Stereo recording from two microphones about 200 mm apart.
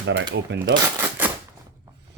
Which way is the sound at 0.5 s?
60° right (ahead or behind).